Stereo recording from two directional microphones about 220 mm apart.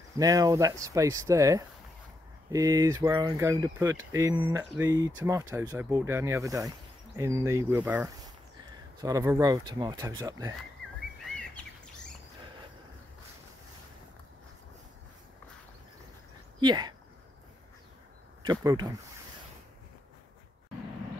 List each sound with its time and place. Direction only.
0.2 s speech: 15° right (ahead or behind)
11.2 s bird: 5° left (ahead or behind)
16.5 s speech: 20° right (ahead or behind)
18.4 s speech: 15° right (ahead or behind)